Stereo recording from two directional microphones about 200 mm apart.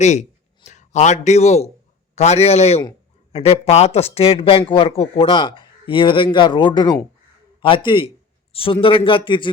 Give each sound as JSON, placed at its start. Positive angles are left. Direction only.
{"t": 0.0, "sound": "a man's voice", "side_deg": 35}